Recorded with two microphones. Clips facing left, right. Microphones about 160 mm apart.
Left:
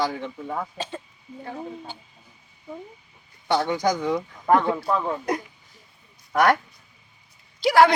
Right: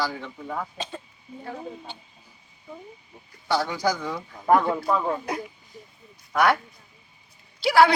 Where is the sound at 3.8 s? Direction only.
20° left (ahead or behind).